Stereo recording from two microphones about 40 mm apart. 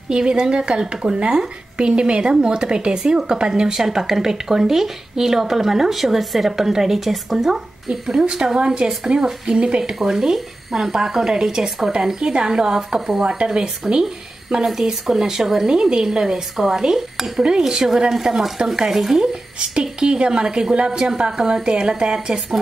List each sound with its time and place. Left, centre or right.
0.1 s speech: right
9.9 s speech: centre
14.6 s speech: centre
19.7 s speech: right
21.3 s speech: centre